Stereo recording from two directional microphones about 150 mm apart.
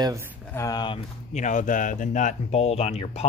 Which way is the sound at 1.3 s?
55° left (ahead or behind).